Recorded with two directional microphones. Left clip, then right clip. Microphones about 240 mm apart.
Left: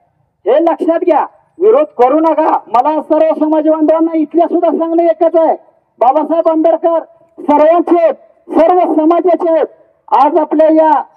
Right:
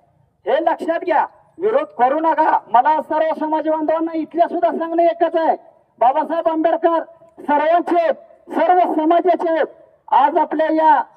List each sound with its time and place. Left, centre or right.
0.5 s speech: left